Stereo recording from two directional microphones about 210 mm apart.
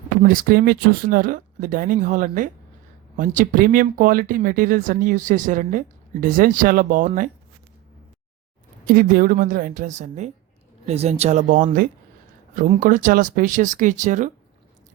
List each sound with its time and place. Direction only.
0.2 s speech: 45° right (ahead or behind)
8.9 s speech: 45° right (ahead or behind)